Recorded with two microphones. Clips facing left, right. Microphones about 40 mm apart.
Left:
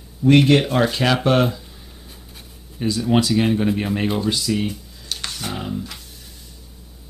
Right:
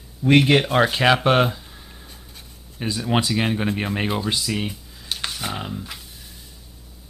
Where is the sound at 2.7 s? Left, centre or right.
Centre.